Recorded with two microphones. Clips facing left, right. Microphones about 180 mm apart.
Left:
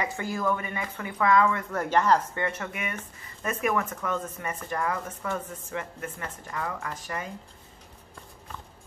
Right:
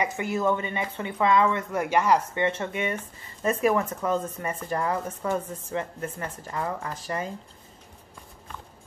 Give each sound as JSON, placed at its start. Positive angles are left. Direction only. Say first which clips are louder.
{"t": 0.0, "sound": "speech", "louder": "right 3 dB", "side_deg": -20}
{"t": 2.3, "sound": "speech", "louder": "right 5 dB", "side_deg": -25}